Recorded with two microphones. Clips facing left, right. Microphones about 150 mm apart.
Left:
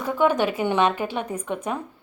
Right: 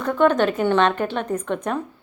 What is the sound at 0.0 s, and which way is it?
A woman's voice, 10° left (ahead or behind).